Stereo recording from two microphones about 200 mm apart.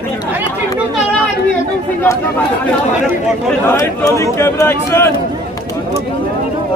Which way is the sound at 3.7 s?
15° left (ahead or behind).